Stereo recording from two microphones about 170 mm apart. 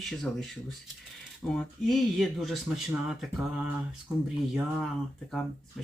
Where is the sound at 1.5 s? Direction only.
Centre (ahead or behind).